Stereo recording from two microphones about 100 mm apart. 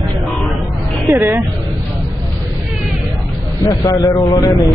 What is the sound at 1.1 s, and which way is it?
Speech, 20° right (ahead or behind).